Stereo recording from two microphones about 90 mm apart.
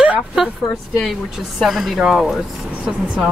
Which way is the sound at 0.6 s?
Centre (ahead or behind).